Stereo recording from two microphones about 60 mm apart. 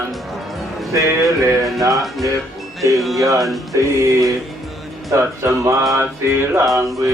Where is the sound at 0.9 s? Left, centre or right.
Right.